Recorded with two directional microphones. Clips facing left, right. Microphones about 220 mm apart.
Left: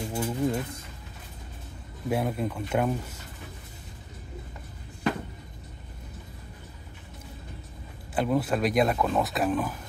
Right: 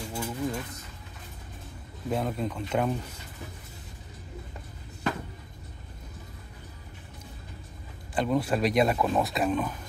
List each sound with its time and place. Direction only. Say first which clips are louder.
0.1 s a sound: left 4 dB; 20° left (ahead or behind)
2.0 s speech: left 2 dB; 10° left (ahead or behind)
8.1 s speech: left 1 dB; 5° left (ahead or behind)